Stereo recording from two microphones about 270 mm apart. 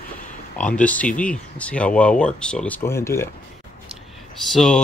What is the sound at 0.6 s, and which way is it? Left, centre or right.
Speech, centre.